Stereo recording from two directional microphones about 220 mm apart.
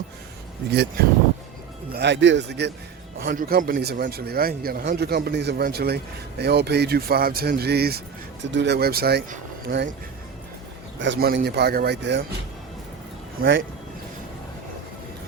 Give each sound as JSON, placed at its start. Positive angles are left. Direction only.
{"t": 0.7, "sound": "a man's voice", "side_deg": -45}
{"t": 11.0, "sound": "a man's voice", "side_deg": -50}